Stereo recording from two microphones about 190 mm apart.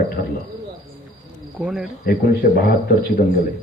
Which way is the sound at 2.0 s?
55° left (ahead or behind).